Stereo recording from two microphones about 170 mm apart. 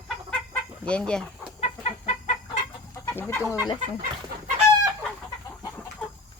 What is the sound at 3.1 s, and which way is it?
Chicken, 10° left (ahead or behind).